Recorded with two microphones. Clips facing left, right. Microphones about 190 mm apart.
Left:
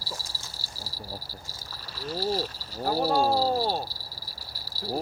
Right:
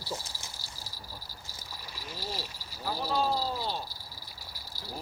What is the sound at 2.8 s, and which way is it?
Speech, 45° left (ahead or behind).